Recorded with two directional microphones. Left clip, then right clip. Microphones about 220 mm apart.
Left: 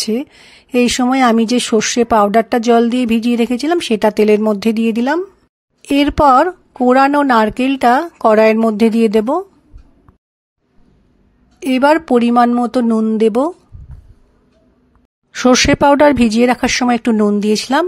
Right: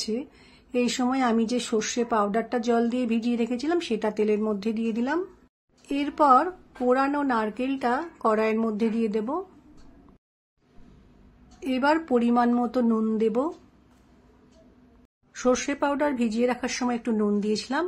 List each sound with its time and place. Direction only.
0.0 s speech: 40° left (ahead or behind)
11.6 s speech: 40° left (ahead or behind)
15.3 s a woman's voice: 40° left (ahead or behind)